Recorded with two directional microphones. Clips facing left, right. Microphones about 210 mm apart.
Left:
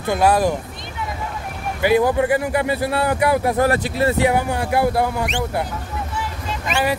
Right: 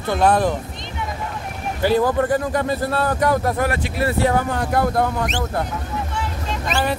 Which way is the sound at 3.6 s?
35° left (ahead or behind).